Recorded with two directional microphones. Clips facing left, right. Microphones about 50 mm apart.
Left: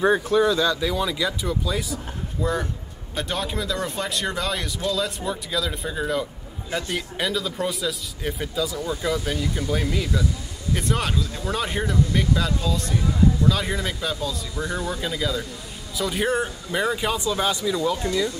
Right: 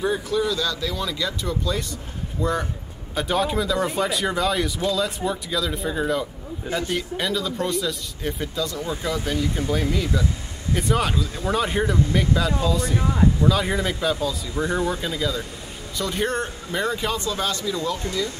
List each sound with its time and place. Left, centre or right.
0.3 s speech: left
0.6 s a man's voice: centre
15.0 s a man's voice: centre